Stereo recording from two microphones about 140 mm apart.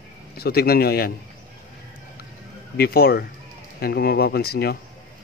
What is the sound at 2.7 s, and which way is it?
A man's voice, 90° left.